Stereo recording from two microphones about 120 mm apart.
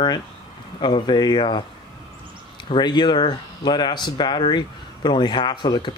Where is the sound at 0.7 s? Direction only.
40° left (ahead or behind).